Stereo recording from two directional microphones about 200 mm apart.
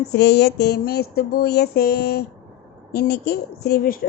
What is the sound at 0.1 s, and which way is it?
A woman's voice, 55° left (ahead or behind).